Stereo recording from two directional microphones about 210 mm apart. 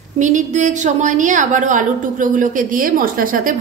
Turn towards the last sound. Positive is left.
turn(degrees=-40)  # may be behind; listen again after turning